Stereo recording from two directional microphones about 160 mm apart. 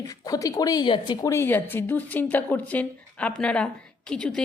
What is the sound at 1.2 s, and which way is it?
A woman's voice, 15° left (ahead or behind).